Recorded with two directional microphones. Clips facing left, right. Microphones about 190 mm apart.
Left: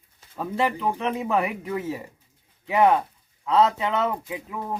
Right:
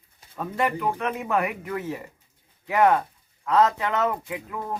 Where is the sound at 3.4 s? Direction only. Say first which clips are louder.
Even; 25° left (ahead or behind).